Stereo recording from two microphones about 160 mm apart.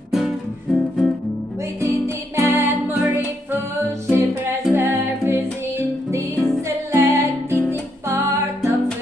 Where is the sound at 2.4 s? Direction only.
15° right (ahead or behind).